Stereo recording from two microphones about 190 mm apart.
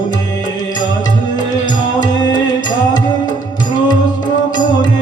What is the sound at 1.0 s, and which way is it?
Music, 20° left (ahead or behind).